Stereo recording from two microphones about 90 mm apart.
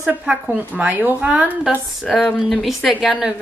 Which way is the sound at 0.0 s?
10° right (ahead or behind).